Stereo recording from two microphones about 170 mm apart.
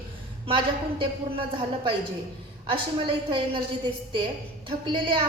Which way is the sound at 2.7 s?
30° right (ahead or behind).